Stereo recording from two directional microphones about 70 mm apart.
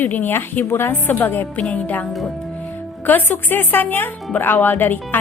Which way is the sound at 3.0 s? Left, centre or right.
Left.